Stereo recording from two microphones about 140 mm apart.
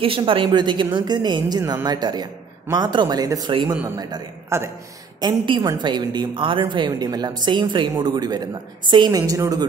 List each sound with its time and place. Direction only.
0.0 s speech: 40° right (ahead or behind); by 4.6 s 25° right (ahead or behind)
5.2 s speech: 35° right (ahead or behind)